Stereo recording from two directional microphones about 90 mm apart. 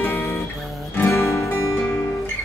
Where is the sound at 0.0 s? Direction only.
20° left (ahead or behind).